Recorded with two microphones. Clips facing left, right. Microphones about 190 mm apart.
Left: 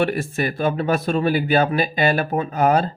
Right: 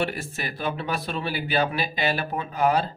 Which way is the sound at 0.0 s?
55° left (ahead or behind).